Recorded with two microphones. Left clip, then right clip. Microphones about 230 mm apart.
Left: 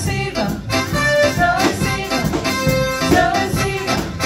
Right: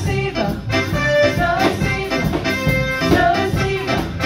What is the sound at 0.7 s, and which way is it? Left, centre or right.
Music, left.